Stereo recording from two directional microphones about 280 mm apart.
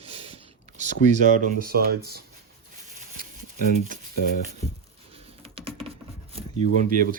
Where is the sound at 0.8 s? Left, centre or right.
Right.